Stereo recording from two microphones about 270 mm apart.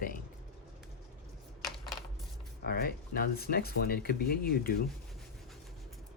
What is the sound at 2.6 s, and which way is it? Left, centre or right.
Speech, left.